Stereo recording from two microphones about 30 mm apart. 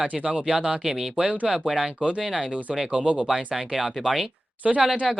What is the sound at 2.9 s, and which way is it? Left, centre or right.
Speech, right.